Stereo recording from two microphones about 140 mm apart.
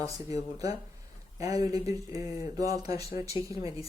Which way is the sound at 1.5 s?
25° right (ahead or behind).